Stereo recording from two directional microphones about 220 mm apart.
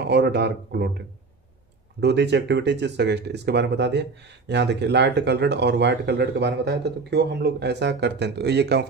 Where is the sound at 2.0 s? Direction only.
50° right (ahead or behind).